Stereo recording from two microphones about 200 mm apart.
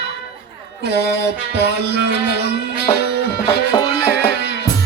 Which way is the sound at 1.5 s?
55° right (ahead or behind).